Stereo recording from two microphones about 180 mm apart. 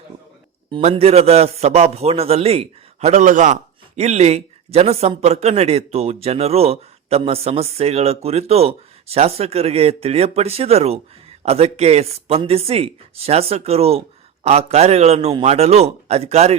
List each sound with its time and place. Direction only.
0.8 s a man's voice: 35° right (ahead or behind)